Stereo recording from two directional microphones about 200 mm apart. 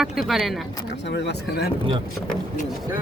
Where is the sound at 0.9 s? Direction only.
60° left (ahead or behind).